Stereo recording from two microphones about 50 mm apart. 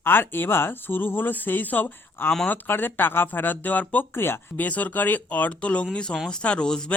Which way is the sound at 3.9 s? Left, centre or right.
Left.